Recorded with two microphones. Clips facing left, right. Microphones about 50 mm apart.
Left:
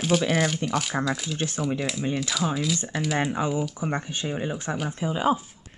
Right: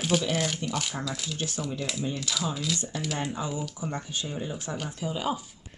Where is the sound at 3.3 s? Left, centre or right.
Left.